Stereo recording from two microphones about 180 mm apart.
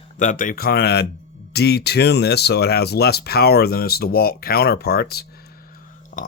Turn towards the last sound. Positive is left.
turn(degrees=50)  # may be behind; listen again after turning